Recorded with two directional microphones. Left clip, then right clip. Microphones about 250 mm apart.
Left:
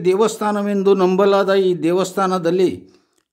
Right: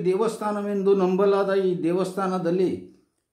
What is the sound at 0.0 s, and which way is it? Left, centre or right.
A man's voice, left.